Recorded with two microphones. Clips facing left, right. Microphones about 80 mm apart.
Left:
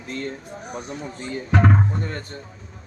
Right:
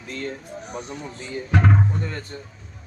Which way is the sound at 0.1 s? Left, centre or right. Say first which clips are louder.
Left 1 dB; left.